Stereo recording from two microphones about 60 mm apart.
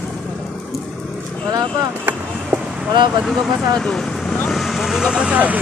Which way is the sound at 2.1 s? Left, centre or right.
Right.